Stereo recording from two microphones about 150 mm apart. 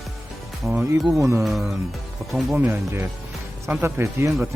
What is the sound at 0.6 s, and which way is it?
Speech, 5° right (ahead or behind).